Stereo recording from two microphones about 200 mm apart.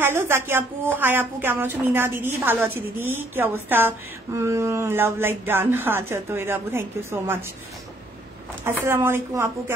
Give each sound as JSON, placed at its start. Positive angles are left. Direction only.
{"t": 0.0, "sound": "a woman's voice", "side_deg": -10}
{"t": 8.6, "sound": "a woman's voice", "side_deg": -10}